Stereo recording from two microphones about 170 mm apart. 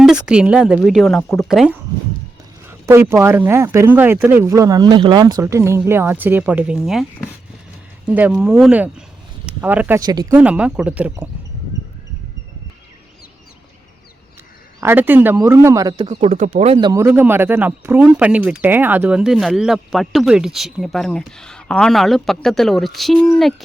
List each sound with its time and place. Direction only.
0.0 s speech: 5° right (ahead or behind)
2.6 s speech: 15° right (ahead or behind)
8.0 s speech: 10° right (ahead or behind)
10.0 s speech: 25° right (ahead or behind)
10.3 s speech: 10° right (ahead or behind)
14.8 s speech: 15° right (ahead or behind)
16.0 s speech: 40° right (ahead or behind)
16.9 s speech: 15° right (ahead or behind); by 23.6 s centre (ahead or behind)